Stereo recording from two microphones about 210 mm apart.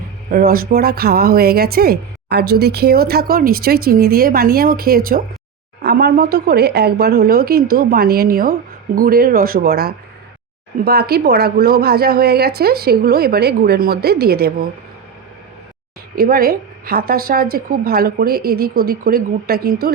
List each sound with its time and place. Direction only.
0.3 s a woman's voice: 45° right (ahead or behind)
16.1 s a woman's voice: 45° right (ahead or behind)